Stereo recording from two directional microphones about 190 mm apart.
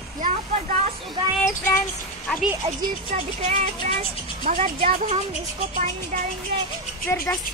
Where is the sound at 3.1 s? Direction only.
35° right (ahead or behind).